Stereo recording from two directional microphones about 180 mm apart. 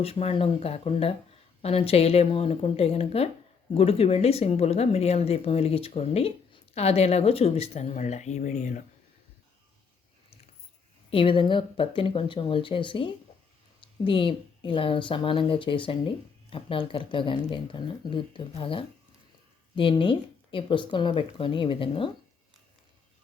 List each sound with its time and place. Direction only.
0.0 s speech: 35° left (ahead or behind)
11.1 s speech: 30° left (ahead or behind)